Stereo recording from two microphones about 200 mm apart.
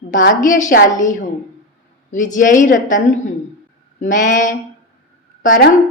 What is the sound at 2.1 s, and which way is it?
A woman's voice, 40° left (ahead or behind).